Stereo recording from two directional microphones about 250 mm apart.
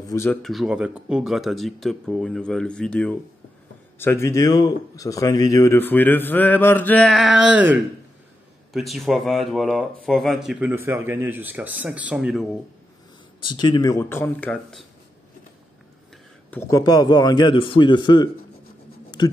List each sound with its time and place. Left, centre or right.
0.0 s speech: centre
13.5 s speech: centre
16.4 s speech: centre